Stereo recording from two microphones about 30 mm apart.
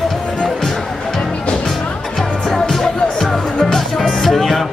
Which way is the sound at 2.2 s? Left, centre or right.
Centre.